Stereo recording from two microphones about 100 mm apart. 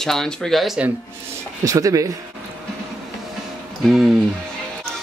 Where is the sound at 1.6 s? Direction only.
35° right (ahead or behind).